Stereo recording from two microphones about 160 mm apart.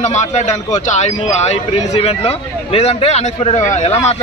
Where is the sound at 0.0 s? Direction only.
45° left (ahead or behind).